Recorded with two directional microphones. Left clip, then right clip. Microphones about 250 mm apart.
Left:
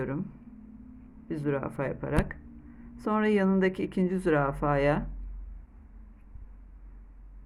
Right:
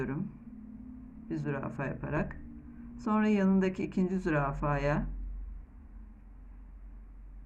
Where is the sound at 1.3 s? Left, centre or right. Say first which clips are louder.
Left 5 dB; left.